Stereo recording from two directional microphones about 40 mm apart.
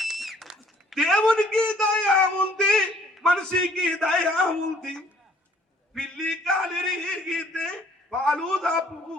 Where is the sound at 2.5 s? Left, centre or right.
Centre.